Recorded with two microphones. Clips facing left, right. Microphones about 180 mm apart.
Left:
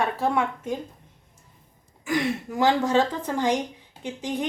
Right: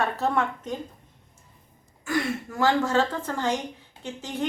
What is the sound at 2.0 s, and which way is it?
A woman's voice, 15° left (ahead or behind).